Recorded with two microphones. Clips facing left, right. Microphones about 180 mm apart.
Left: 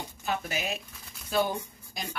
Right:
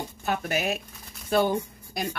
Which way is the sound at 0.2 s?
55° right (ahead or behind).